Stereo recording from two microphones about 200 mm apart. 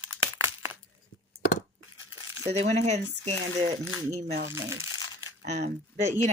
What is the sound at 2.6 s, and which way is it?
Speech, 35° right (ahead or behind).